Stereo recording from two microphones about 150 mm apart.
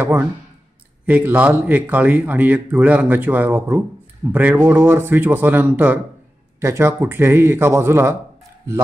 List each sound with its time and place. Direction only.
0.0 s speech: 15° right (ahead or behind)